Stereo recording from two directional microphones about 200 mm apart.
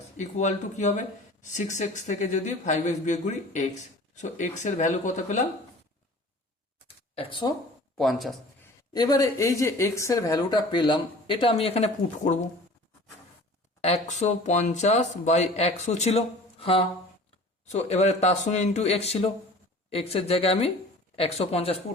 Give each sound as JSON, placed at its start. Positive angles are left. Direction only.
{"t": 0.2, "sound": "speech", "side_deg": 35}
{"t": 6.8, "sound": "a sound", "side_deg": 25}
{"t": 7.9, "sound": "speech", "side_deg": 0}
{"t": 8.6, "sound": "speech", "side_deg": 20}
{"t": 13.8, "sound": "speech", "side_deg": 35}